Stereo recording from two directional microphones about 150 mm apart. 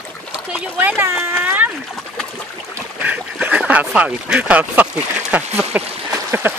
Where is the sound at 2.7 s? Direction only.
10° right (ahead or behind).